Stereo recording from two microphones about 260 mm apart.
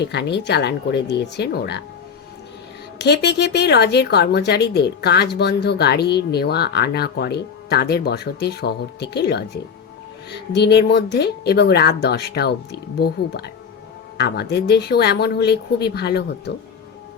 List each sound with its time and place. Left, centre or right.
0.0 s speech: left
3.0 s speech: left